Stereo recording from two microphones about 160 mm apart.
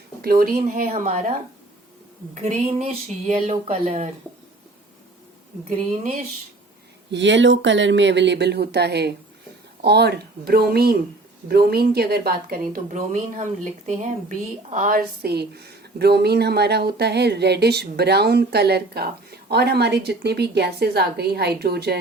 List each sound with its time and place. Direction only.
0.2 s speech: 70° right (ahead or behind); by 1.3 s 50° right (ahead or behind)
2.3 s speech: 45° right (ahead or behind)
7.1 s speech: 90° right